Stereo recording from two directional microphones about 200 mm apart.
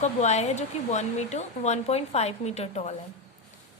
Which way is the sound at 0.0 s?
35° left (ahead or behind).